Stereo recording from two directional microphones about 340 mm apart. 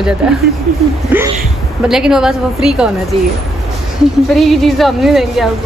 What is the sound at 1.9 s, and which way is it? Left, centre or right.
A woman's voice, centre.